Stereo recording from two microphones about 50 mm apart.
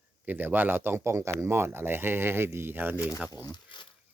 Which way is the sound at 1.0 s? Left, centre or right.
Right.